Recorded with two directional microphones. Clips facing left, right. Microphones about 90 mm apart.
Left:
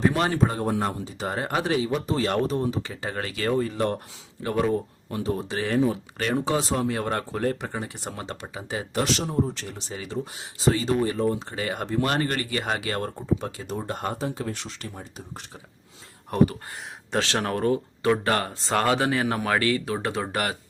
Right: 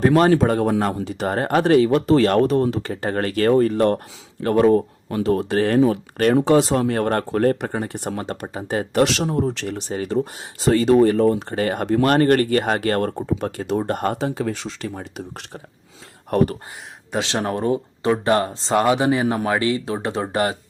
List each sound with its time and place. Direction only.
0.3 s speech: 70° right (ahead or behind)
2.9 s speech: 50° right (ahead or behind)
9.0 s speech: 80° right; by 14.2 s 55° right (ahead or behind)
14.2 s speech: 85° right
16.3 s speech: 60° right (ahead or behind)
17.1 s speech: 20° right (ahead or behind)